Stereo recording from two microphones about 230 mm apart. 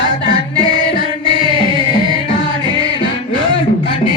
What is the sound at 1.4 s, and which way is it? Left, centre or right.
Music, right.